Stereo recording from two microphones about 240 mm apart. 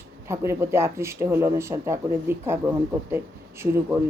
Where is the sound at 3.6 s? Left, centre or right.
Centre.